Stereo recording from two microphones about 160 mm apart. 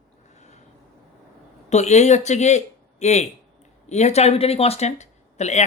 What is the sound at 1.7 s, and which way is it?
Speech, 45° left (ahead or behind).